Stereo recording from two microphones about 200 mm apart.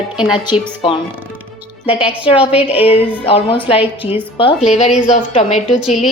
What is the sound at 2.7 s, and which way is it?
Music, 30° left (ahead or behind).